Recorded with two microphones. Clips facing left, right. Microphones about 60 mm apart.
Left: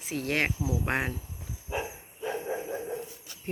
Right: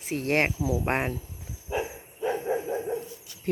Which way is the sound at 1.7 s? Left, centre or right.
Centre.